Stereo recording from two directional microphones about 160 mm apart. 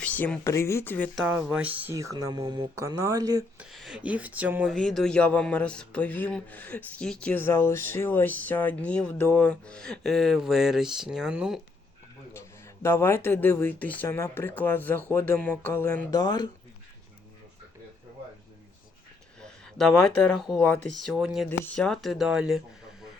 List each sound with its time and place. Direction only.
0.0 s speech: 10° left (ahead or behind)
1.1 s speech: 10° right (ahead or behind)
2.0 s speech: 20° right (ahead or behind)
3.6 s speech: centre (ahead or behind)
4.7 s speech: 5° left (ahead or behind)
12.3 s speech: 15° left (ahead or behind)
16.1 s speech: 25° left (ahead or behind)
19.4 s speech: 5° left (ahead or behind)